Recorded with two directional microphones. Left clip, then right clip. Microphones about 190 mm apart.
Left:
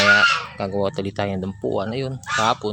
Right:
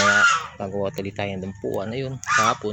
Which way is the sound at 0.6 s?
10° left (ahead or behind).